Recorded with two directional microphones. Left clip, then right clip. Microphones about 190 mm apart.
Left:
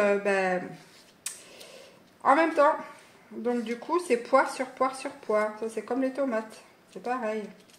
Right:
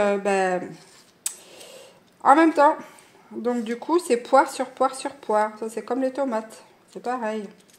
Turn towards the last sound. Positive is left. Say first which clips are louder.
# right 3 dB
turn(degrees=-45)  # may be behind; listen again after turning